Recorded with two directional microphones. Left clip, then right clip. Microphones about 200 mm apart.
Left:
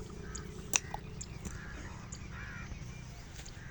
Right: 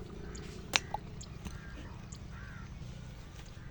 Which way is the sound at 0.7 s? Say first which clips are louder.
Right 2 dB; 15° left (ahead or behind).